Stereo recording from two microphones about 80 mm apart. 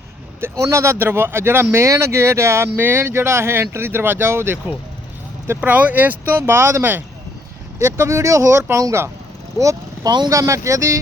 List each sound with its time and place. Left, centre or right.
0.5 s speech: right
5.5 s speech: centre; by 11.0 s right